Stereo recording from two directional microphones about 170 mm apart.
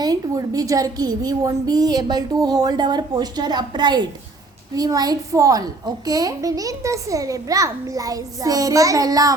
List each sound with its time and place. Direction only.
0.0 s a woman's voice: 20° right (ahead or behind)